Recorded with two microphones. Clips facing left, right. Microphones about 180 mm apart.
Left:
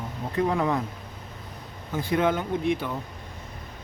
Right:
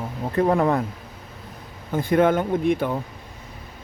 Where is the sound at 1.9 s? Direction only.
50° right (ahead or behind).